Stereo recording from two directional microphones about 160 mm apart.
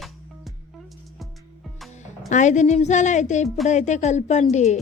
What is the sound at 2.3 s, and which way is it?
A woman's voice, 50° left (ahead or behind).